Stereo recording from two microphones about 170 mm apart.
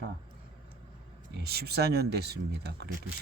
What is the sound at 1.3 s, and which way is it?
Speech, 70° right (ahead or behind).